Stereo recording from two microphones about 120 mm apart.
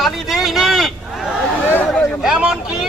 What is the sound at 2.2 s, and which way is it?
Speech, 5° right (ahead or behind).